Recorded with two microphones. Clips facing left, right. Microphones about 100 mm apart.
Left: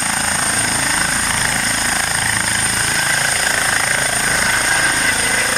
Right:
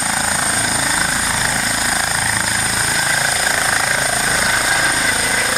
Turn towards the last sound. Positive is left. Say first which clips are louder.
# even
turn(degrees=-5)  # may be behind; listen again after turning